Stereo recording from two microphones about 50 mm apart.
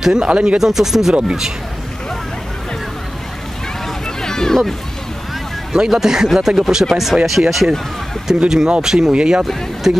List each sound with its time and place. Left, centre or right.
0.0 s speech: centre
0.6 s speech: centre
4.2 s a sound: centre
5.7 s speech: centre
8.5 s speech: centre
9.8 s speech: centre